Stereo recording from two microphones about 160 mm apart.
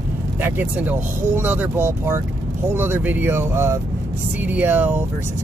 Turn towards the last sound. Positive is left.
turn(degrees=-10)  # may be behind; listen again after turning